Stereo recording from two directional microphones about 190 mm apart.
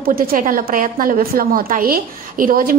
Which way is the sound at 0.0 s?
50° right (ahead or behind).